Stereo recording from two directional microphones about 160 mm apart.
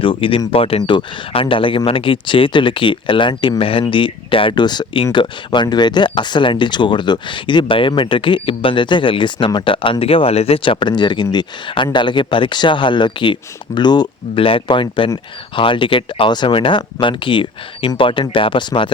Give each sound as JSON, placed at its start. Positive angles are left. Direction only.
{"t": 0.0, "sound": "speech", "side_deg": 35}